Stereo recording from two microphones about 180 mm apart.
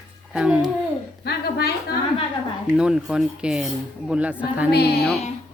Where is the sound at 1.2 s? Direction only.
65° left (ahead or behind).